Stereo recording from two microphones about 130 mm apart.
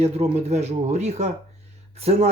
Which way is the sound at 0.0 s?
55° right (ahead or behind).